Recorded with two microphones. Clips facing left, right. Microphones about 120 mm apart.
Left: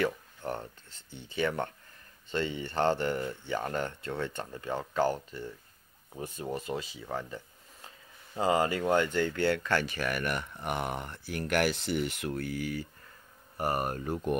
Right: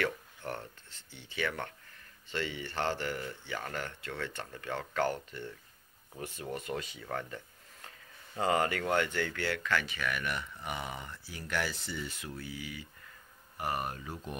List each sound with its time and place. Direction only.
0.0 s a sound: 20° left (ahead or behind)
1.3 s speech: 30° left (ahead or behind)
7.0 s speech: 15° left (ahead or behind)
8.4 s speech: 25° left (ahead or behind)
9.8 s speech: 45° left (ahead or behind)